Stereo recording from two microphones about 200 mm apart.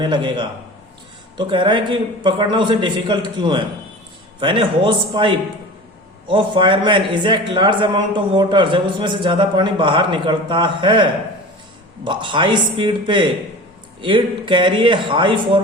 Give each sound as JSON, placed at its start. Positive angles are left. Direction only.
{"t": 0.0, "sound": "a man's voice", "side_deg": -25}